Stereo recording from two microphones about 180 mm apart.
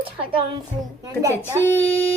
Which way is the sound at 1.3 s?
15° left (ahead or behind).